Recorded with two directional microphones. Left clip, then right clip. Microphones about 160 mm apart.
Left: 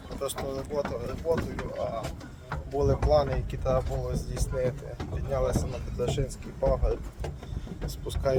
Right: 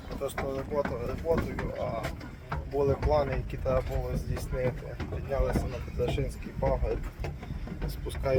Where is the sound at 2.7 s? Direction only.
10° left (ahead or behind).